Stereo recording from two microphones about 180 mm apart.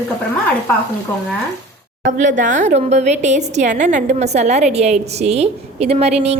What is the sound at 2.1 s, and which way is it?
A woman's voice, 45° right (ahead or behind).